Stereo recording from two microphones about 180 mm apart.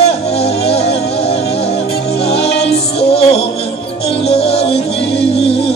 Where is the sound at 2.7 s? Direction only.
35° left (ahead or behind).